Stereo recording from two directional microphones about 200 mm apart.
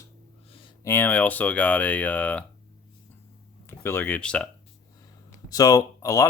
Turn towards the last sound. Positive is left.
turn(degrees=15)  # may be behind; listen again after turning